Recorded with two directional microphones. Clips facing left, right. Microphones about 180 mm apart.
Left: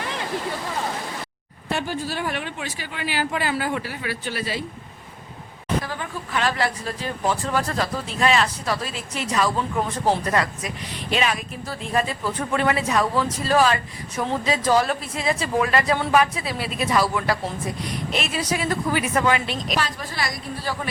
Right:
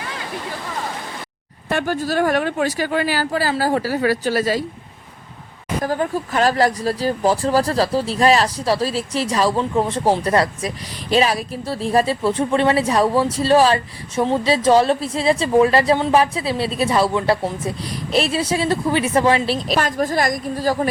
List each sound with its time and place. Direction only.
1.7 s speech: 45° right (ahead or behind)
5.8 s speech: 45° right (ahead or behind)
19.8 s a woman's voice: 45° right (ahead or behind)